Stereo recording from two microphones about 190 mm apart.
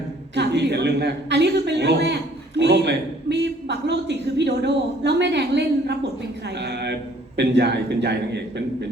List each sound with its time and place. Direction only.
0.3 s a man's voice: 65° right (ahead or behind)